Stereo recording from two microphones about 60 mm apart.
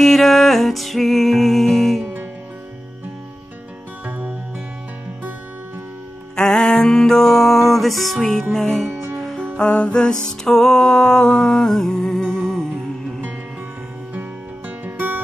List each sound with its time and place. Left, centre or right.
0.0 s music: centre
6.3 s music: centre
9.6 s music: centre
14.9 s music: right